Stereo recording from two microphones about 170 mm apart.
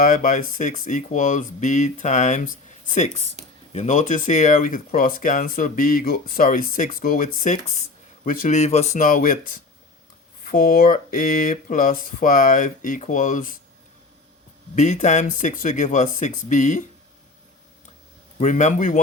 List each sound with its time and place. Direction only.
0.0 s speech: 50° left (ahead or behind)
10.4 s speech: 60° left (ahead or behind)
15.0 s speech: 45° left (ahead or behind)
18.3 s speech: 45° left (ahead or behind)